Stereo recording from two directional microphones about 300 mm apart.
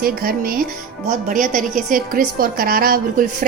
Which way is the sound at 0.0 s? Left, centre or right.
Right.